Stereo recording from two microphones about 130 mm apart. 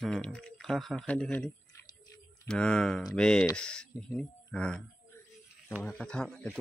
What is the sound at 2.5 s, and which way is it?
Speech, 5° left (ahead or behind).